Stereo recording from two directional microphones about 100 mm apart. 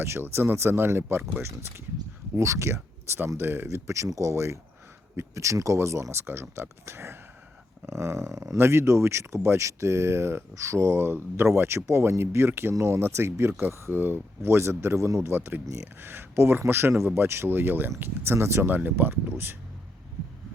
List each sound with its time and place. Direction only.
0.0 s speech: 25° right (ahead or behind)